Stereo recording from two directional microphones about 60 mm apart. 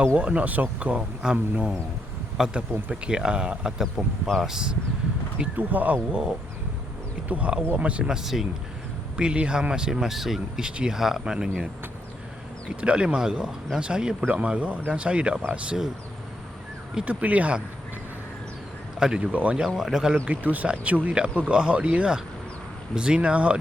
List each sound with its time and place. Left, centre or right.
0.2 s speech: right
5.5 s speech: right
7.3 s speech: right; by 8.4 s centre
9.1 s speech: centre
12.8 s speech: centre
17.1 s speech: right
18.9 s speech: centre
19.3 s speech: right
19.6 s speech: centre
20.2 s speech: right